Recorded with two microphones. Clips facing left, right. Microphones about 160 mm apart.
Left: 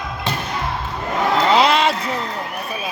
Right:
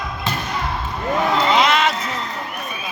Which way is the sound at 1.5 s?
30° left (ahead or behind).